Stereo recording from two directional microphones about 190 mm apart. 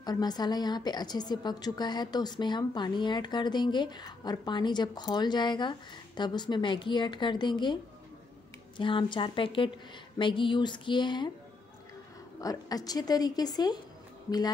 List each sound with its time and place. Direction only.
0.0 s a woman's voice: 20° left (ahead or behind)
12.4 s a woman's voice: 20° left (ahead or behind)